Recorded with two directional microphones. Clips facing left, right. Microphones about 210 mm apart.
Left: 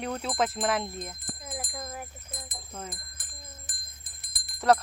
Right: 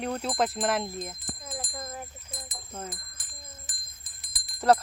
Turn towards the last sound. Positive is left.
turn(degrees=0)  # may be behind; listen again after turning